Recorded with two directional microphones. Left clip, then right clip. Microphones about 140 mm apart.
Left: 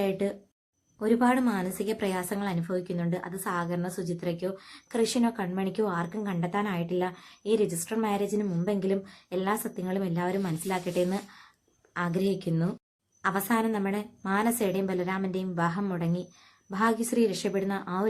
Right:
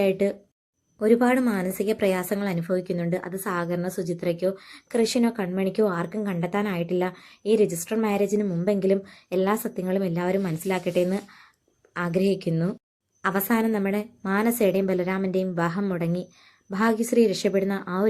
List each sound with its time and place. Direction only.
0.0 s a woman's voice: 30° right (ahead or behind)